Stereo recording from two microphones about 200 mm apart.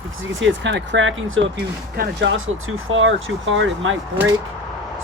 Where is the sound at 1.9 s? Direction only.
60° right (ahead or behind).